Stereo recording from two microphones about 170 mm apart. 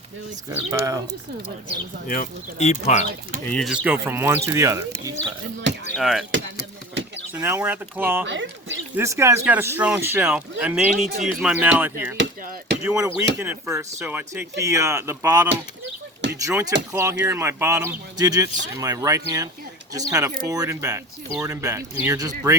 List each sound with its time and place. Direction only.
0.7 s speech: 20° right (ahead or behind)
1.7 s speech: 55° left (ahead or behind)
3.4 s speech: 5° left (ahead or behind)
3.7 s speech: 10° right (ahead or behind)
5.9 s speech: centre (ahead or behind)
7.3 s speech: 10° right (ahead or behind)
8.3 s speech: 90° right
9.0 s speech: 15° right (ahead or behind)
12.2 s speech: 90° right
13.0 s speech: 20° right (ahead or behind)
16.5 s speech: 15° right (ahead or behind)